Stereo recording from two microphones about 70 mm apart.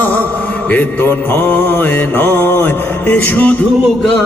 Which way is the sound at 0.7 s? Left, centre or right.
Left.